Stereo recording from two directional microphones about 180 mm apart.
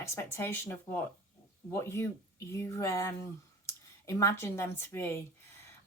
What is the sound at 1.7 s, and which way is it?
Speech, 15° left (ahead or behind).